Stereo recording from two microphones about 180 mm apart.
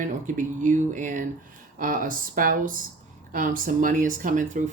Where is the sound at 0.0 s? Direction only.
45° right (ahead or behind).